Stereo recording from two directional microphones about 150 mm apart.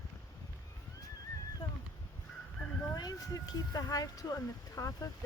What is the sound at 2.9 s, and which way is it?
Speech, 25° left (ahead or behind).